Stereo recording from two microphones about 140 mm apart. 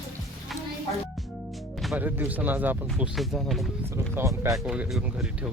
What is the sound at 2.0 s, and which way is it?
Speech, 10° right (ahead or behind).